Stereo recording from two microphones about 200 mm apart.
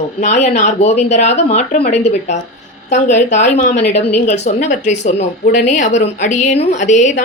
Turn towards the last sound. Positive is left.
turn(degrees=35)  # may be behind; listen again after turning